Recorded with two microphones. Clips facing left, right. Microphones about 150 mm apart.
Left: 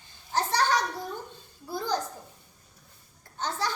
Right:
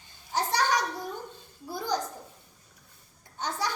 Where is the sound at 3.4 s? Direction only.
15° right (ahead or behind).